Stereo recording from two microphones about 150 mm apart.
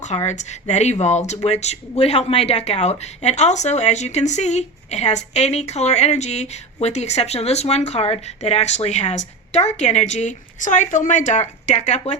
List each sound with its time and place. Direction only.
0.1 s speech: 50° left (ahead or behind)